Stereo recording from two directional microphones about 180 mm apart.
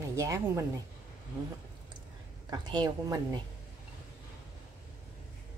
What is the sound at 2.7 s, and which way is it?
Speech, 20° right (ahead or behind).